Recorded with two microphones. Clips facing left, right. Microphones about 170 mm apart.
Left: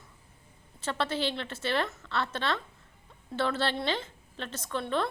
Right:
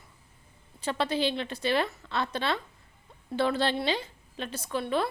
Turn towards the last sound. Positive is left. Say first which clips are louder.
# right 2 dB
turn(degrees=-10)  # may be behind; listen again after turning